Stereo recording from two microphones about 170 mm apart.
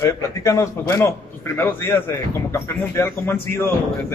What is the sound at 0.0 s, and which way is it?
Speech, 20° left (ahead or behind).